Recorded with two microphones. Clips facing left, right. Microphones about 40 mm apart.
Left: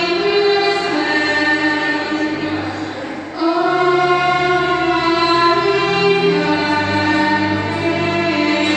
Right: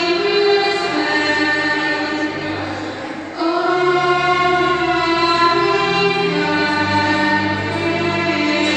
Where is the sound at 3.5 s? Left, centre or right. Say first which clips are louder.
Left 1 dB; centre.